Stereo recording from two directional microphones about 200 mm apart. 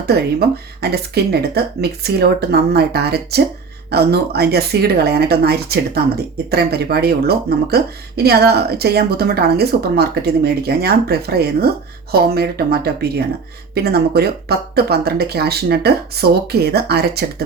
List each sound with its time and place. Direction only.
0.0 s speech: 50° right (ahead or behind)